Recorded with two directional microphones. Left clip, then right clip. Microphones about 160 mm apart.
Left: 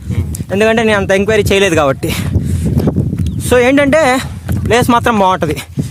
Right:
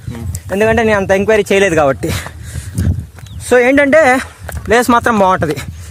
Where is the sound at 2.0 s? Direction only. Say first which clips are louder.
Left 1 dB; 10° left (ahead or behind).